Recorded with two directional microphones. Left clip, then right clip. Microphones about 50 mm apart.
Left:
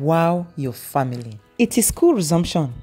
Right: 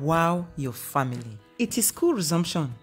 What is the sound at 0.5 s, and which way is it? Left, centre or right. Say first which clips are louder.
Speech: left 5 dB; left.